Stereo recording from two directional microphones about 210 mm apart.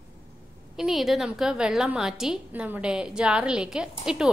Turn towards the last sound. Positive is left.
turn(degrees=-5)  # may be behind; listen again after turning